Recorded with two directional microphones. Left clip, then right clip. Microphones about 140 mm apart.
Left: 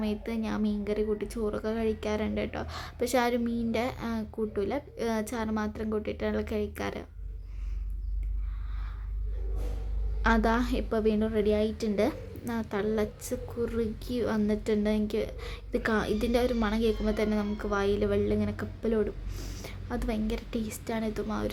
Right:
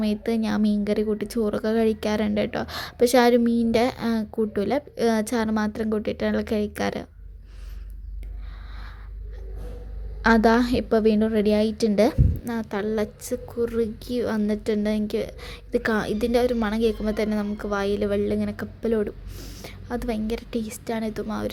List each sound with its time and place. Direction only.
0.0 s a woman's voice: 40° right (ahead or behind)
10.2 s a woman's voice: 35° right (ahead or behind)
19.4 s a sound: 15° right (ahead or behind)
19.6 s a woman's voice: 35° right (ahead or behind)